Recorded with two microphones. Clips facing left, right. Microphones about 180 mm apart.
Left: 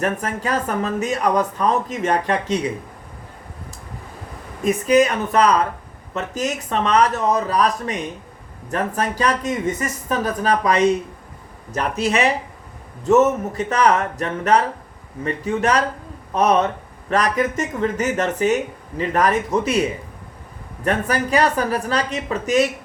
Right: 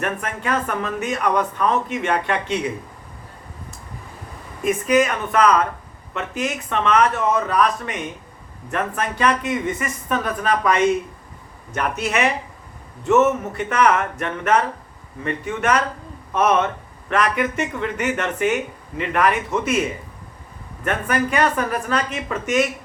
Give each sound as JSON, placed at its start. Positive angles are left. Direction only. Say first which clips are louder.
{"t": 0.0, "sound": "speech", "louder": "left 3 dB", "side_deg": 35}
{"t": 4.6, "sound": "speech", "louder": "left 2 dB", "side_deg": 35}
{"t": 20.8, "sound": "speech", "louder": "left 1 dB", "side_deg": 35}